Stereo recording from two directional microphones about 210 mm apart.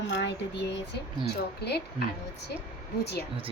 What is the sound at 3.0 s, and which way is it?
Speech, 50° left (ahead or behind).